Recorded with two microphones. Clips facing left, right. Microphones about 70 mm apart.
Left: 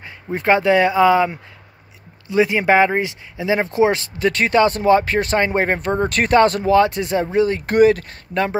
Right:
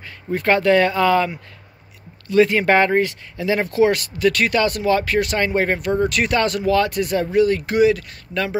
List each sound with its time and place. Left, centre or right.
0.0 s speech: left
7.6 s speech: left